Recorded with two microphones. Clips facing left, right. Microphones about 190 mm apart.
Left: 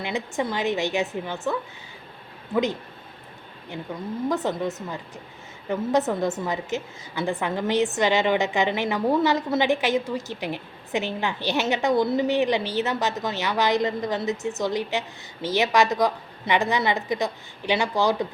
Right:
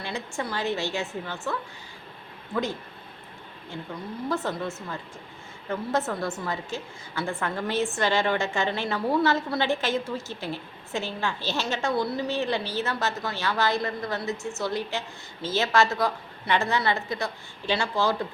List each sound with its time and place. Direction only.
0.0 s a woman's voice: 20° left (ahead or behind)
4.3 s a woman's voice: 15° left (ahead or behind)